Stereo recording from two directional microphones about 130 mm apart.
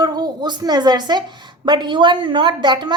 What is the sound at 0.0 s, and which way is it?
A woman's voice, 30° right (ahead or behind).